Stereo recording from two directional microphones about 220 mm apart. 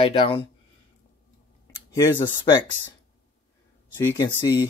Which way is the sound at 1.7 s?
15° left (ahead or behind).